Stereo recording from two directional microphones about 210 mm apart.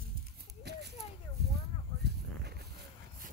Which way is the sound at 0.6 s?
50° right (ahead or behind).